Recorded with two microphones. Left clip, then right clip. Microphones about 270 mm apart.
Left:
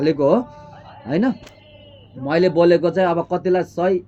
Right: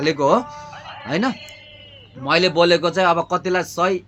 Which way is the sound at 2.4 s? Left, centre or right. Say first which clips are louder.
Left 1 dB; centre.